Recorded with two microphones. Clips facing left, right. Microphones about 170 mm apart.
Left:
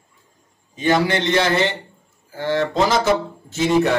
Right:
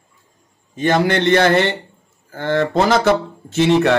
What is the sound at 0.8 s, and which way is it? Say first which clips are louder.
Speech: right 2 dB; 55° right (ahead or behind).